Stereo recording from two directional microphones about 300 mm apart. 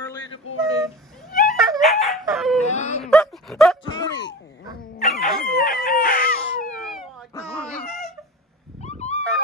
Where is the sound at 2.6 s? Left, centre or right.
Left.